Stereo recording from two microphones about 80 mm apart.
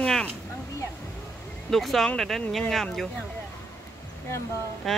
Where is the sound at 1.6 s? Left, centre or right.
Centre.